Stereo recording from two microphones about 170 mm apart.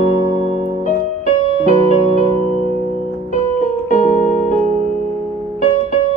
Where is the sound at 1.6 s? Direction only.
40° right (ahead or behind).